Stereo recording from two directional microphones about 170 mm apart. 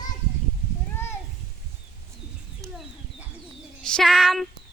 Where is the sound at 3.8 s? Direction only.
5° left (ahead or behind).